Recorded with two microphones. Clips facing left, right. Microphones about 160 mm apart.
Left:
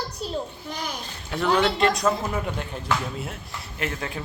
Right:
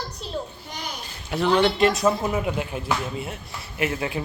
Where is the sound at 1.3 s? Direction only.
Centre (ahead or behind).